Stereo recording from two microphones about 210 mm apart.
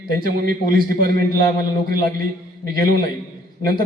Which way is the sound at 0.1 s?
45° right (ahead or behind).